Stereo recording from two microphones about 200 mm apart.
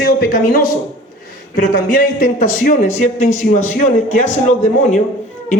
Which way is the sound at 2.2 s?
40° left (ahead or behind).